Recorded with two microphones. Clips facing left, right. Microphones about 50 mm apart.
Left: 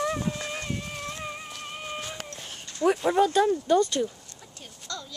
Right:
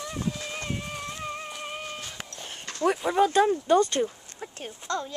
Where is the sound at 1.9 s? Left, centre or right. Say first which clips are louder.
Left 3 dB; centre.